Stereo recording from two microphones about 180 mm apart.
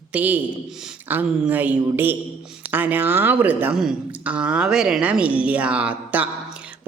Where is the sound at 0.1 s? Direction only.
10° right (ahead or behind).